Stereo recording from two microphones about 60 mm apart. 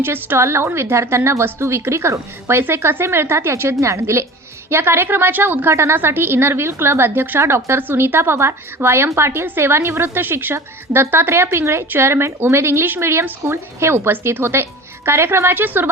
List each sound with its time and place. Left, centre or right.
0.0 s a woman's voice: right